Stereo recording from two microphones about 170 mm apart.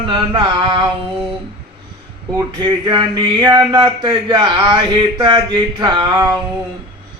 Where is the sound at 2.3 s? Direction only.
25° right (ahead or behind).